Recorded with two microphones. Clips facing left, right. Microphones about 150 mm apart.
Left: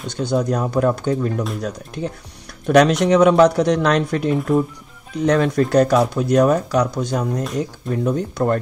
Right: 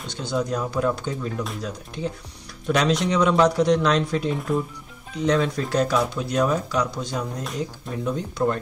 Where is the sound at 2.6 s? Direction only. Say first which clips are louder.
Left 8 dB; 60° left (ahead or behind).